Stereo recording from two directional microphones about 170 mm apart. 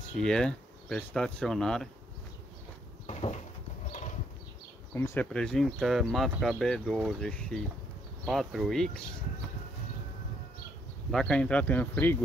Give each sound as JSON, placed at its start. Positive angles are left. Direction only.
{"t": 0.2, "sound": "speech", "side_deg": 5}
{"t": 3.1, "sound": "a sound", "side_deg": 40}
{"t": 3.9, "sound": "bee", "side_deg": 45}
{"t": 4.9, "sound": "speech", "side_deg": 15}
{"t": 11.1, "sound": "speech", "side_deg": 5}